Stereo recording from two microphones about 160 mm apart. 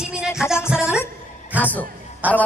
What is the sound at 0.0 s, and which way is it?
Music, 5° right (ahead or behind).